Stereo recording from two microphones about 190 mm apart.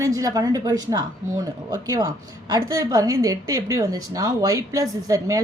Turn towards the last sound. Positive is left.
turn(degrees=-15)  # may be behind; listen again after turning